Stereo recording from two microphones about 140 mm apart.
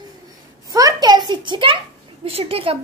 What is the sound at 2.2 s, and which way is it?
Speech, 45° right (ahead or behind).